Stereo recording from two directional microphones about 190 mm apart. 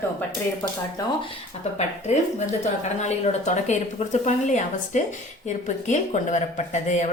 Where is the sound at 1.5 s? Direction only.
35° left (ahead or behind).